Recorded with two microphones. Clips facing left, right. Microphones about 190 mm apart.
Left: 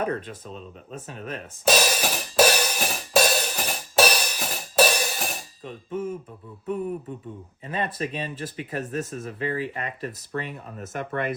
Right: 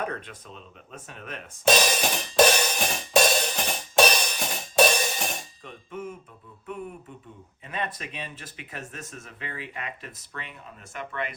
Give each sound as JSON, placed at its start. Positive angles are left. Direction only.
{"t": 0.3, "sound": "speech", "side_deg": 35}
{"t": 1.6, "sound": "cymbal", "side_deg": 5}
{"t": 5.6, "sound": "speech", "side_deg": 40}
{"t": 7.9, "sound": "speech", "side_deg": 35}